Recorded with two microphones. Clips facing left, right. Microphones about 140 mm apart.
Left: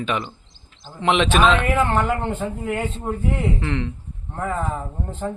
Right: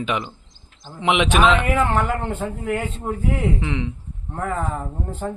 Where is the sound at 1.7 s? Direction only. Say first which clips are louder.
Even; centre (ahead or behind).